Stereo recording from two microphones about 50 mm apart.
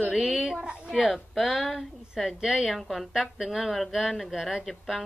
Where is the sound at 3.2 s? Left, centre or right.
Centre.